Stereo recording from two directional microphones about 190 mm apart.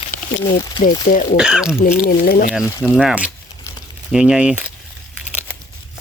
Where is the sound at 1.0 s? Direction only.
40° left (ahead or behind).